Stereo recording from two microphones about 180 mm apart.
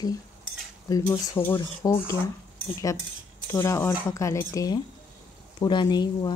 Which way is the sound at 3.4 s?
15° left (ahead or behind).